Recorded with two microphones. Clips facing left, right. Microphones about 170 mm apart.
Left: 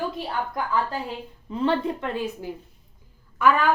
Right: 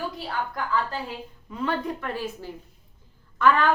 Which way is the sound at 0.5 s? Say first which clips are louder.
Left 2 dB; 20° left (ahead or behind).